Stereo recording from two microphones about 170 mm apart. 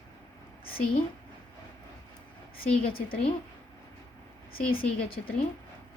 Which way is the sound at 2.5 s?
60° left (ahead or behind).